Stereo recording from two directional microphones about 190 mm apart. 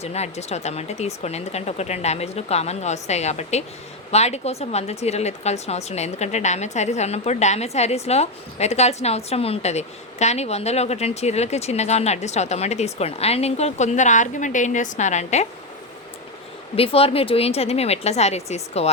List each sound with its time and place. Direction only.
0.0 s speech: 35° left (ahead or behind)
16.7 s speech: 30° left (ahead or behind)